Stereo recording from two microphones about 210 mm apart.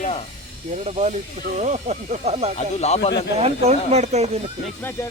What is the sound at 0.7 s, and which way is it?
Speech, 30° right (ahead or behind).